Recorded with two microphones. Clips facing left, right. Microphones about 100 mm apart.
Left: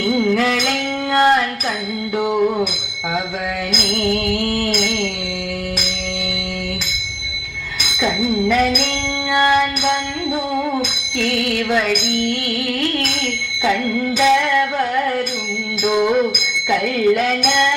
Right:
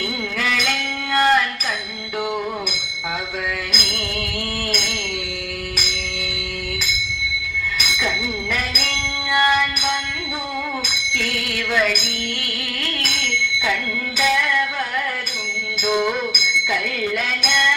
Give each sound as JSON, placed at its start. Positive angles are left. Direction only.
{"t": 0.0, "sound": "music", "side_deg": 25}
{"t": 3.8, "sound": "music", "side_deg": 20}
{"t": 7.9, "sound": "a sound", "side_deg": 20}
{"t": 9.3, "sound": "music", "side_deg": 25}
{"t": 11.5, "sound": "music", "side_deg": 25}
{"t": 14.2, "sound": "music", "side_deg": 25}
{"t": 17.2, "sound": "music", "side_deg": 35}